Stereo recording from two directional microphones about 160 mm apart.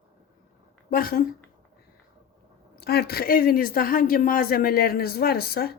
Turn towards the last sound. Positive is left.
turn(degrees=75)  # may be behind; listen again after turning